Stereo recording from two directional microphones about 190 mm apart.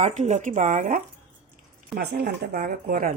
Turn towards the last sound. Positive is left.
turn(degrees=-50)  # may be behind; listen again after turning